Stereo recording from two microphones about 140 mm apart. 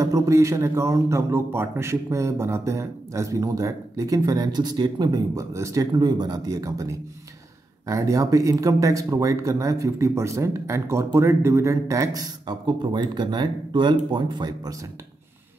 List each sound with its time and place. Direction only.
0.0 s speech: 25° right (ahead or behind)